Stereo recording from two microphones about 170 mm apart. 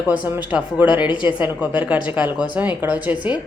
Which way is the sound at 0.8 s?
25° left (ahead or behind).